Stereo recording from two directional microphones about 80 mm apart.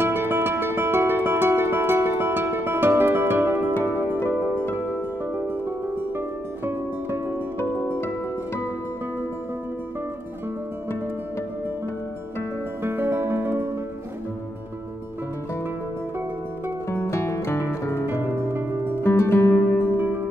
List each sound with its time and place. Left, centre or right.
0.0 s music: right
5.2 s music: right
12.4 s music: right
17.0 s music: left
18.2 s music: right
19.0 s music: left
19.8 s music: right